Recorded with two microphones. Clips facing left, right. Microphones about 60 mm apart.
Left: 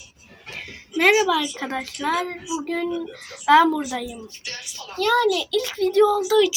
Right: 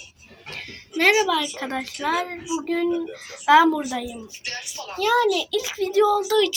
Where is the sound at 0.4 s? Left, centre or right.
Centre.